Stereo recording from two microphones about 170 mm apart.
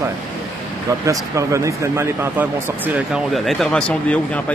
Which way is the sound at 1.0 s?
20° right (ahead or behind).